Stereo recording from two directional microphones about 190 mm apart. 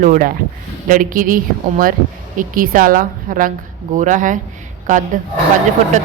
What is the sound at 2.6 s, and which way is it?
Speech, 45° right (ahead or behind).